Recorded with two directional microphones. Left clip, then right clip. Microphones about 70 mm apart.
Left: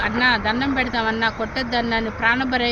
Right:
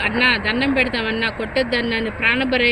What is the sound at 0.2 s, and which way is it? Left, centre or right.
Speech, left.